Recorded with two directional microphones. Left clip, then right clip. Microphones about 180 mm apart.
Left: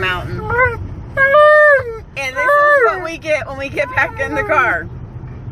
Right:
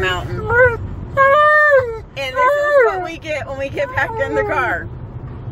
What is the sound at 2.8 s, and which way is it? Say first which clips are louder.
Speech: left 3 dB; 30° left (ahead or behind).